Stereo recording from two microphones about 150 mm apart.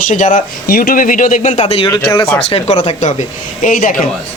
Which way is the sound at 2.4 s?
40° left (ahead or behind).